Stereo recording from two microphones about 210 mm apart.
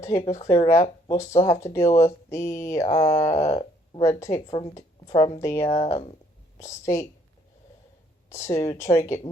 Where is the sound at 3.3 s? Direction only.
30° left (ahead or behind).